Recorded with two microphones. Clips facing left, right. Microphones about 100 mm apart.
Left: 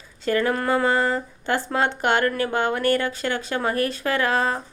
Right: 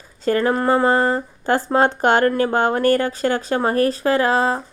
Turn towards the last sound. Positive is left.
turn(degrees=-30)  # may be behind; listen again after turning